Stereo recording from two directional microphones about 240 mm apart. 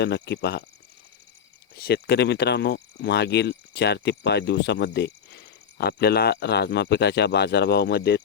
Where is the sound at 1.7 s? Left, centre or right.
Left.